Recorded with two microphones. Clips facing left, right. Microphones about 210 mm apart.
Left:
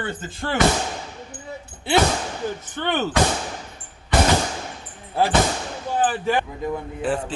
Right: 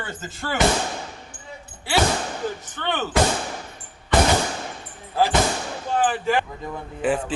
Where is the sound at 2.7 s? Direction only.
15° left (ahead or behind).